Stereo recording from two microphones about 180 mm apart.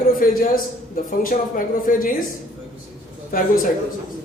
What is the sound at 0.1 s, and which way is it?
A man's voice, 50° left (ahead or behind).